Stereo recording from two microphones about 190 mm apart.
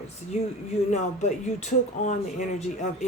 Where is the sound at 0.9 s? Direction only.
40° left (ahead or behind).